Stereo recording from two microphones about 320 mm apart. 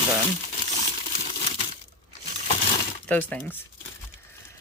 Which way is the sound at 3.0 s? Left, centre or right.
Centre.